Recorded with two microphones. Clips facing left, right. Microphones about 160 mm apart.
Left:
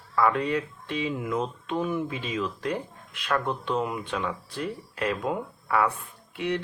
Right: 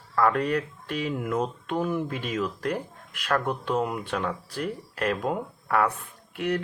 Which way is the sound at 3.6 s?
45° right (ahead or behind).